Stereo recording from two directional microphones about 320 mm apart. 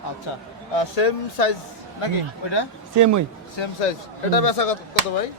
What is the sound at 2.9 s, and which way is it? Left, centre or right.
Speech, right.